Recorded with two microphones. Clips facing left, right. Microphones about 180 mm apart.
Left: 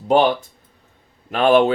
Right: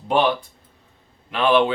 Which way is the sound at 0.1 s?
40° left (ahead or behind).